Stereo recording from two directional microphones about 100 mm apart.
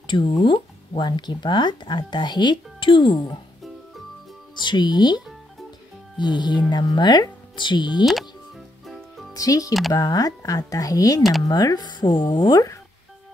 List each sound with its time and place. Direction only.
0.0 s speech: 55° left (ahead or behind)
4.6 s speech: 50° left (ahead or behind)
8.0 s speech: centre (ahead or behind)
8.8 s music: centre (ahead or behind)
9.3 s speech: 35° left (ahead or behind)